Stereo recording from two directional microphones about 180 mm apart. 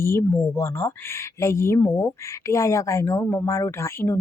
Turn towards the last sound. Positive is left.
turn(degrees=15)  # may be behind; listen again after turning